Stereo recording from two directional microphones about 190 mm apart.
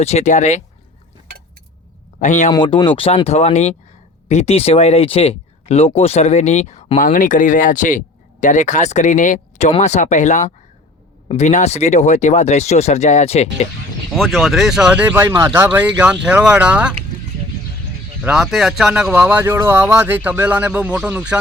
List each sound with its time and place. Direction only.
0.0 s speech: 35° left (ahead or behind)
2.1 s speech: 40° left (ahead or behind)
2.5 s speech: 25° left (ahead or behind)
14.1 s speech: centre (ahead or behind)
18.2 s speech: 5° right (ahead or behind)